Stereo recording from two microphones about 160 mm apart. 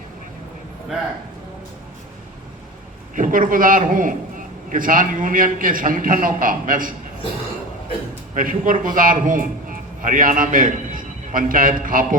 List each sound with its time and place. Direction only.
3.2 s a man's voice: 60° right (ahead or behind)
8.4 s a man's voice: 55° right (ahead or behind)